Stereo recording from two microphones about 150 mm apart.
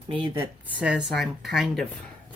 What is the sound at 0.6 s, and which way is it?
Speech, 10° right (ahead or behind).